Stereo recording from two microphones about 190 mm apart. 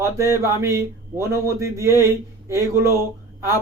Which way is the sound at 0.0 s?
15° right (ahead or behind).